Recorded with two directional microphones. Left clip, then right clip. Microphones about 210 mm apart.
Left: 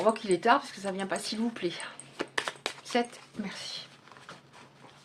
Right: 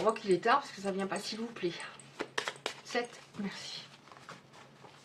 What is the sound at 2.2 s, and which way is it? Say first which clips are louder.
Coin: left 4 dB; 15° left (ahead or behind).